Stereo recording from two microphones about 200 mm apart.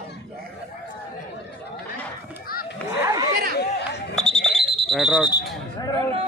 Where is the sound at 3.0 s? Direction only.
15° right (ahead or behind).